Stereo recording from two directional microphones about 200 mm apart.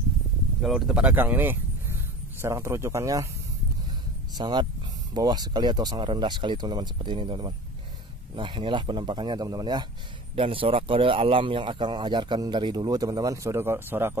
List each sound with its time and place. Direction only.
0.6 s speech: centre (ahead or behind)
4.4 s speech: 20° right (ahead or behind)